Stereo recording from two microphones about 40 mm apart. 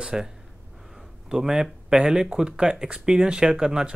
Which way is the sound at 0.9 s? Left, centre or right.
Centre.